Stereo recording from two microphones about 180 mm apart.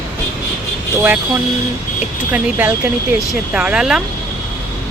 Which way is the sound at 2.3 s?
10° right (ahead or behind).